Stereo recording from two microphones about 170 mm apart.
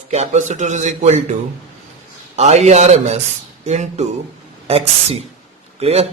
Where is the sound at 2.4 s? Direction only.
40° right (ahead or behind).